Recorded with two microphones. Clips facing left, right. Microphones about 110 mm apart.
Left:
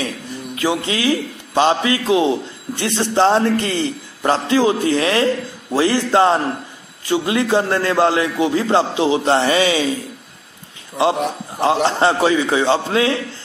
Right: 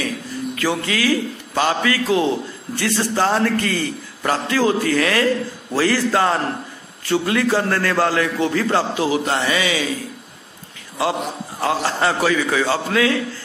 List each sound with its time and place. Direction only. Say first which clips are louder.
0.6 s a man's voice: left 2 dB; 20° left (ahead or behind)
11.6 s a man's voice: left 4 dB; 25° left (ahead or behind)